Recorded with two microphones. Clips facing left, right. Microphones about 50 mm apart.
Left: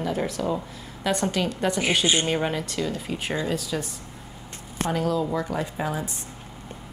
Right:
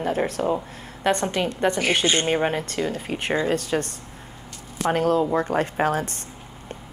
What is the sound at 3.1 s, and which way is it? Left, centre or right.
Speech, right.